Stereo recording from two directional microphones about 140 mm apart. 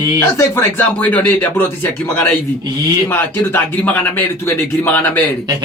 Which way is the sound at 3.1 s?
15° left (ahead or behind).